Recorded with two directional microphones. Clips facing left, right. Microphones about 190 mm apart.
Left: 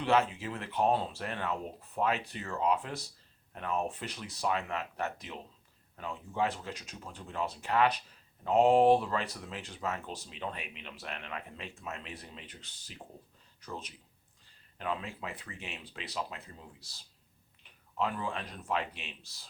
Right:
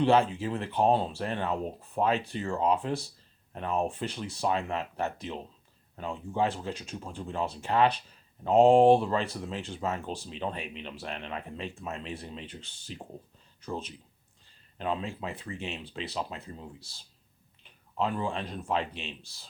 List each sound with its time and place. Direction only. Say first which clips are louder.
0.0 s speech: right 5 dB; 30° right (ahead or behind)